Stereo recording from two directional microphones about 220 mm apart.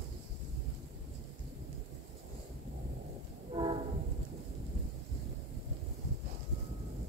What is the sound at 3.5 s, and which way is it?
Train, 25° right (ahead or behind).